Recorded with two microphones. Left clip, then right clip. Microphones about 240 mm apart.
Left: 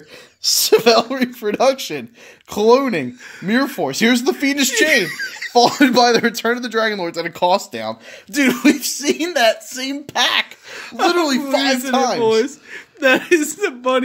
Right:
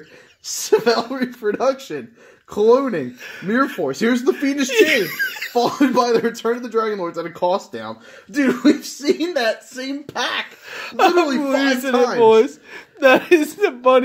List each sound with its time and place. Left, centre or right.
0.7 s speech: left
2.5 s speech: left
5.0 s speech: centre
5.5 s speech: left
7.3 s speech: left
10.8 s a woman's voice: centre